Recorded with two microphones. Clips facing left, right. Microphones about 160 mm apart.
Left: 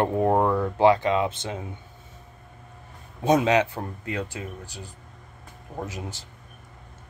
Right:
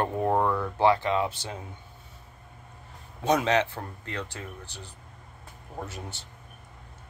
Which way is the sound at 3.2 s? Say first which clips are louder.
Left 4 dB; 15° left (ahead or behind).